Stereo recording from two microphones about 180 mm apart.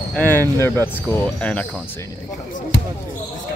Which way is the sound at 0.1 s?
10° left (ahead or behind).